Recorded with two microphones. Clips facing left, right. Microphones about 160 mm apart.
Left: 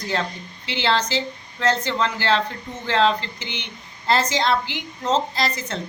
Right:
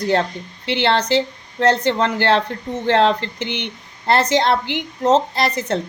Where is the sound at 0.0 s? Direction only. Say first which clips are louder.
Right 7 dB; 60° right (ahead or behind).